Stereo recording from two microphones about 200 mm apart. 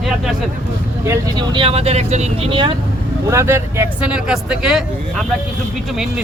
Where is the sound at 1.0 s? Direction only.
15° right (ahead or behind).